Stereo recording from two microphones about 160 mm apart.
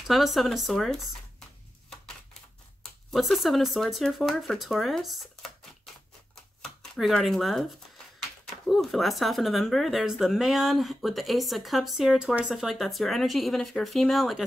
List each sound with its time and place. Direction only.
0.0 s speech: centre (ahead or behind)
2.8 s speech: centre (ahead or behind)
6.6 s speech: centre (ahead or behind)
8.6 s speech: centre (ahead or behind)